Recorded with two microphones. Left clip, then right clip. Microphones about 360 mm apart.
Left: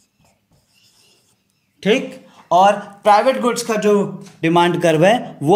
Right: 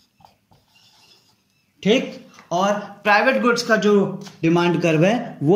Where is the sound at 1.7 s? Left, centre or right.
Left.